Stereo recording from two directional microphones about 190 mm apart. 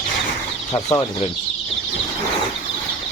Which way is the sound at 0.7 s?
20° left (ahead or behind).